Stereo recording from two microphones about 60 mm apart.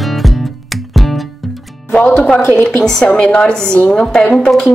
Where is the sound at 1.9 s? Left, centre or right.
Centre.